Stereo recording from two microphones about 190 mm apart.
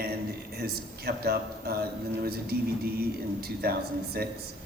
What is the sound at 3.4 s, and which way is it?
Speech, 55° right (ahead or behind).